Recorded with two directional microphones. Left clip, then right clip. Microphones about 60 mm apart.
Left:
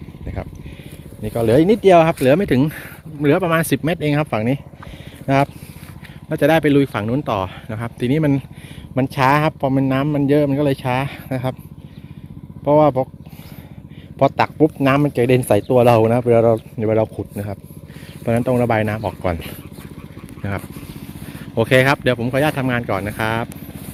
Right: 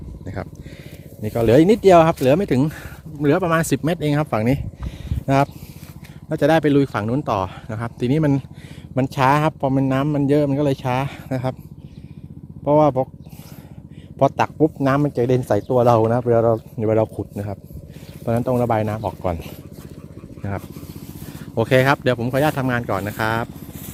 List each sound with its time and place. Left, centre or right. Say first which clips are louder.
1.3 s speech: even; right
1.9 s speech: left 1 dB; centre
2.1 s speech: left 2 dB; centre
6.2 s speech: left 2 dB; centre
12.6 s speech: left 2 dB; centre
14.2 s speech: left 2 dB; centre
14.6 s speech: left 3 dB; centre
15.4 s speech: left 4 dB; left
15.7 s speech: left 2 dB; left
16.9 s speech: left 1 dB; right
17.3 s speech: left 1 dB; centre
18.3 s speech: left 2 dB; centre
21.2 s speech: left 2 dB; centre